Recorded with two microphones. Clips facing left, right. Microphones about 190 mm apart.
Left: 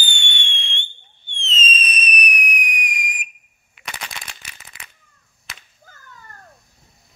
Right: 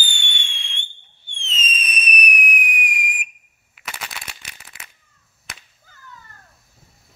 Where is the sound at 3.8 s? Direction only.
5° right (ahead or behind).